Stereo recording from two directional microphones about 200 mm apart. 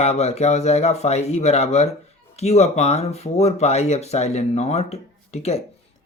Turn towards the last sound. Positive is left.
turn(degrees=30)  # may be behind; listen again after turning